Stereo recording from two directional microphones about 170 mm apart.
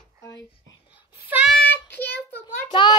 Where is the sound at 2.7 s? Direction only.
25° left (ahead or behind).